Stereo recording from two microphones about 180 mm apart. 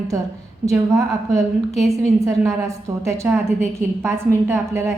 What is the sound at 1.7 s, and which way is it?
Speech, centre (ahead or behind).